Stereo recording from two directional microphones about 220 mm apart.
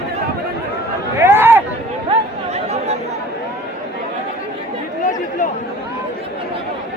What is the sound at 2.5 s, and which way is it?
Chatter, 30° right (ahead or behind).